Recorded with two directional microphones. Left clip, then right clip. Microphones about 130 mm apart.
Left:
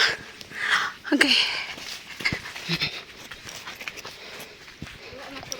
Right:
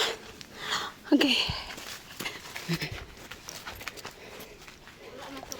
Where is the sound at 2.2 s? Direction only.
30° right (ahead or behind).